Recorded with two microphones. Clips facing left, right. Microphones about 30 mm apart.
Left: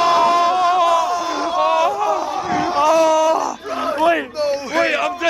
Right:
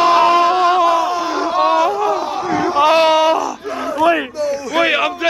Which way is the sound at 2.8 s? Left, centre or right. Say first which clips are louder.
Right 2 dB; right.